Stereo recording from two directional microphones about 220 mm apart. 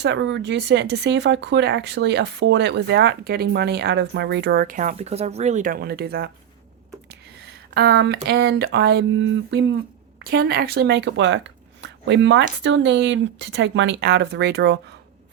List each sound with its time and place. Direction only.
0.0 s speech: 55° right (ahead or behind)
7.7 s speech: 55° right (ahead or behind)
10.2 s speech: 45° right (ahead or behind)